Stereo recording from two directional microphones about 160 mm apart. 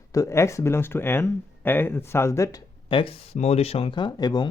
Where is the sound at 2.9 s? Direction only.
35° left (ahead or behind).